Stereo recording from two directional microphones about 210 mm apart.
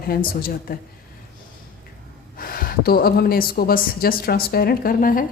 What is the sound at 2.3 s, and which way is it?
A woman's voice, 45° left (ahead or behind).